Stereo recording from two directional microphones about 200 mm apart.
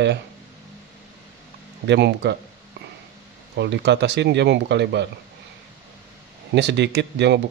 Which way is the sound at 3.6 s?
60° right (ahead or behind).